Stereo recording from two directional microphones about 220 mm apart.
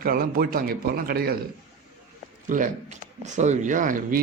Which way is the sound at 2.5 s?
35° right (ahead or behind).